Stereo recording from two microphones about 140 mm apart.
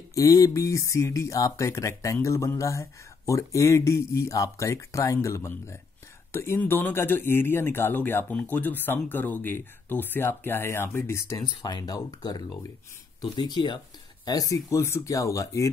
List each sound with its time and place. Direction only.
0.1 s speech: 25° left (ahead or behind)
11.5 s speech: 30° left (ahead or behind)